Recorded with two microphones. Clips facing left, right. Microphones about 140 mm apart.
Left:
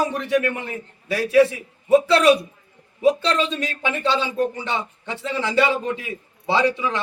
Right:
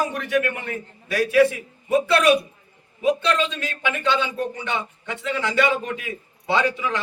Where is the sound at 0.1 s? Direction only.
30° left (ahead or behind).